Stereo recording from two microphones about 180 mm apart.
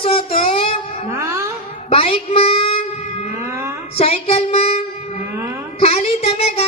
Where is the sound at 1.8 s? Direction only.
35° left (ahead or behind).